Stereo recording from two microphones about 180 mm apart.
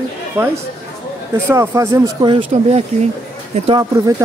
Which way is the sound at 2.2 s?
35° right (ahead or behind).